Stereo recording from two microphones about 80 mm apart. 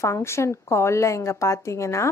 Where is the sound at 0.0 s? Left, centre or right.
Left.